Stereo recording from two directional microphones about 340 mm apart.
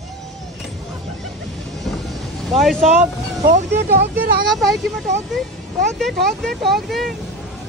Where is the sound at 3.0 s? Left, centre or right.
Right.